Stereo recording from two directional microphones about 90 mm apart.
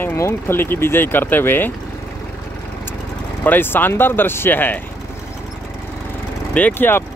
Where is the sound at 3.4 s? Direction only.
25° left (ahead or behind).